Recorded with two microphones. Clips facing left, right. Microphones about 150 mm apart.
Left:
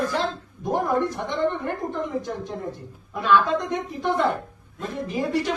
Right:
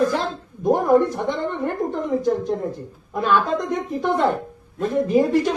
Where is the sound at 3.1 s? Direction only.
45° right (ahead or behind).